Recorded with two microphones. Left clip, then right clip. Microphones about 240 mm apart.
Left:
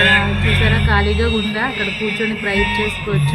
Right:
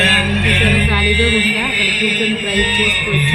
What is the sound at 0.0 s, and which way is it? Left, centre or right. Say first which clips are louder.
Music: right 1 dB; right.